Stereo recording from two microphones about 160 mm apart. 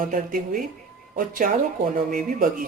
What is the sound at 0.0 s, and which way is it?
Speech, 55° right (ahead or behind).